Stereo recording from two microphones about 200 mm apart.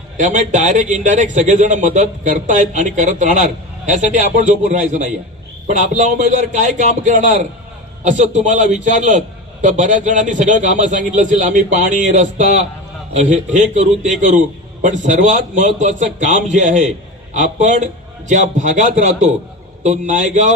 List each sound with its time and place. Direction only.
0.2 s a man's voice: 40° right (ahead or behind)